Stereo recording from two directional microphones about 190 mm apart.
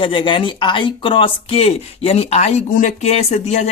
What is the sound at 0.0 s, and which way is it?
Speech, 25° left (ahead or behind).